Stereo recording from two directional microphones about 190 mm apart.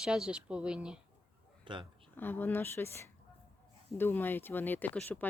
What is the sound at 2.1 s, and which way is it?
Speech, 10° left (ahead or behind).